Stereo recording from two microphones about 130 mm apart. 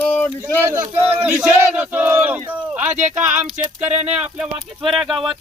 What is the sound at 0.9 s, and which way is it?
Speech, 15° right (ahead or behind).